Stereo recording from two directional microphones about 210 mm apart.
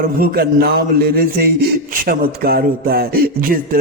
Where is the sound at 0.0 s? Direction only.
45° right (ahead or behind).